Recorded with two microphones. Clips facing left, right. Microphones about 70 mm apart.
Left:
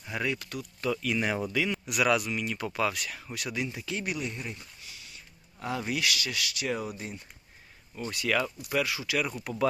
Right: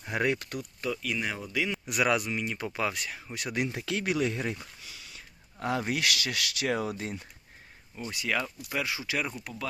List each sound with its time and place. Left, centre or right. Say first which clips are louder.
0.0 s speech: right 4 dB; right
0.8 s speech: left 4 dB; centre
1.9 s speech: even; right
2.6 s speech: left 3 dB; centre
2.9 s speech: even; right
3.3 s speech: right 1 dB; right
3.6 s speech: right 4 dB; right
5.5 s speech: right 2 dB; right
8.1 s speech: left 2 dB; centre
9.3 s speech: left 4 dB; centre